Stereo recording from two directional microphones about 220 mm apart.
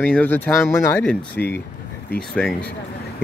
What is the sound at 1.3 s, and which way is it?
Speech, 50° left (ahead or behind).